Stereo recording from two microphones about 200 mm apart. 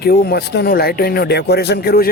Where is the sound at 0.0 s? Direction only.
50° left (ahead or behind).